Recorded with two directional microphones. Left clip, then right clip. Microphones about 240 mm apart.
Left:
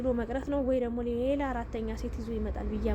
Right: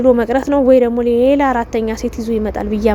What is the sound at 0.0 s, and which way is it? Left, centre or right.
Speech, right.